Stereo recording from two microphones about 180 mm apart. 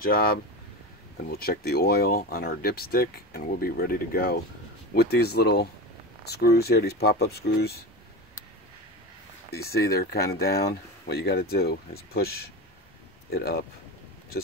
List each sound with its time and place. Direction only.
0.0 s speech: 55° left (ahead or behind)
9.7 s speech: 60° left (ahead or behind)